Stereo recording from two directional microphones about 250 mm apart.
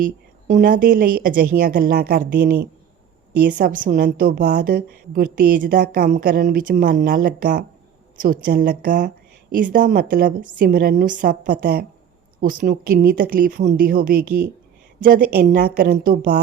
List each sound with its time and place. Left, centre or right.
0.4 s a woman's voice: right